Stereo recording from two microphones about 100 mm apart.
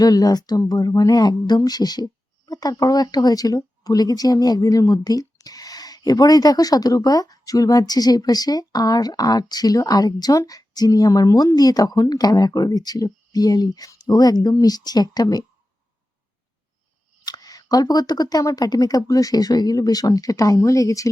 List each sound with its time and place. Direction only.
0.0 s speech: 40° left (ahead or behind)
17.2 s speech: 40° left (ahead or behind)